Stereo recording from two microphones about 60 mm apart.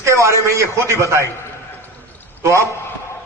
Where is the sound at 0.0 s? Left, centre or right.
Right.